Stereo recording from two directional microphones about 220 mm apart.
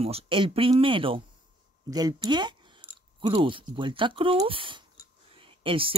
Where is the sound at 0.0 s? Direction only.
25° right (ahead or behind).